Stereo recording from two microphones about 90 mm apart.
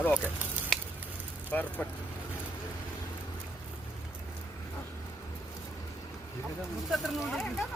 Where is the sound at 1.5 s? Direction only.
15° left (ahead or behind).